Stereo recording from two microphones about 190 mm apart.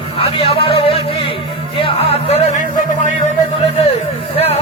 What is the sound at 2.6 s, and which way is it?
Music, 45° right (ahead or behind).